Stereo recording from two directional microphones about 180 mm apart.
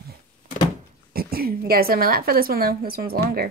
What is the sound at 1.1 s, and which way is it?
A woman's voice, 55° right (ahead or behind).